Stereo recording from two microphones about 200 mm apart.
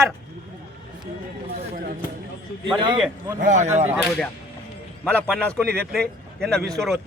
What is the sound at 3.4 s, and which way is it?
Speech, 40° right (ahead or behind).